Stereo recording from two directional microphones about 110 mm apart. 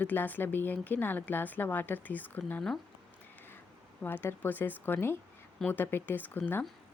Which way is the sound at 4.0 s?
20° left (ahead or behind).